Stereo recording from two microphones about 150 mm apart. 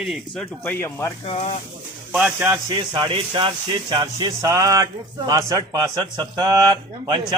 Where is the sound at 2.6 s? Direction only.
30° right (ahead or behind).